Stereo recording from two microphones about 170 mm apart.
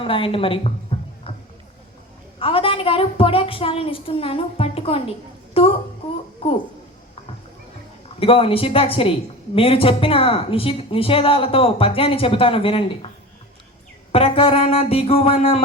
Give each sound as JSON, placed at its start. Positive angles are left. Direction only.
{"t": 0.0, "sound": "a woman's voice", "side_deg": 30}
{"t": 2.4, "sound": "a woman's voice", "side_deg": 30}
{"t": 8.2, "sound": "a woman's voice", "side_deg": 35}
{"t": 14.1, "sound": "a woman's voice", "side_deg": 35}